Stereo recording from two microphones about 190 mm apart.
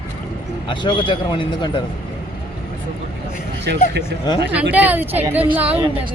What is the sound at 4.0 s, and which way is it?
Speech, 20° left (ahead or behind).